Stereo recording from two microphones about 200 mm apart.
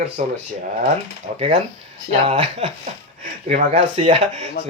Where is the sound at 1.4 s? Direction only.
25° right (ahead or behind).